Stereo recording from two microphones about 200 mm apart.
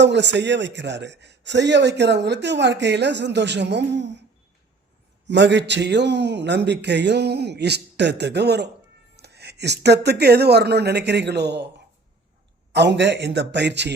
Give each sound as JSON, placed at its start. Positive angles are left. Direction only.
{"t": 0.0, "sound": "a man's voice", "side_deg": -60}
{"t": 5.2, "sound": "a man's voice", "side_deg": -60}
{"t": 12.7, "sound": "a man's voice", "side_deg": -60}